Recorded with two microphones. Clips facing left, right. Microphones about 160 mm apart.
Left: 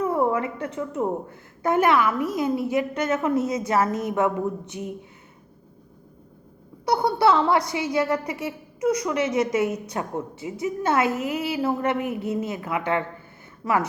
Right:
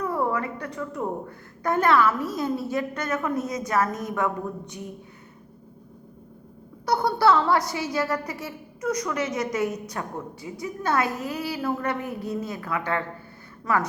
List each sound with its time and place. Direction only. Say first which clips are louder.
0.0 s a woman's voice: left 4 dB; 20° left (ahead or behind)
6.8 s a woman's voice: left 1 dB; 25° left (ahead or behind)